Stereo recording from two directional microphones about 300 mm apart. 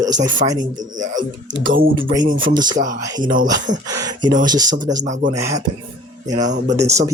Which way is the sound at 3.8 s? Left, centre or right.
Centre.